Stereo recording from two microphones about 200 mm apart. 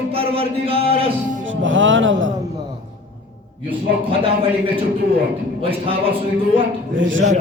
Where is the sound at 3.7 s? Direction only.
25° right (ahead or behind).